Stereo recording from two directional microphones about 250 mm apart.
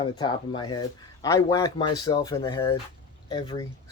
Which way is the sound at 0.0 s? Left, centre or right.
Centre.